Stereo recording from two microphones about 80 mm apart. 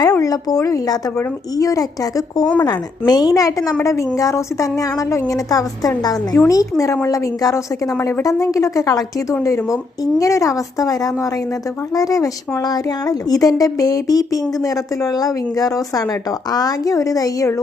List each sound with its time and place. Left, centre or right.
0.0 s a woman's voice: left
2.6 s a woman's voice: left
10.2 s a woman's voice: left